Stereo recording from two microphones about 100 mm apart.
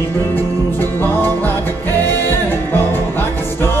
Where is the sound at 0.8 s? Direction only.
20° left (ahead or behind).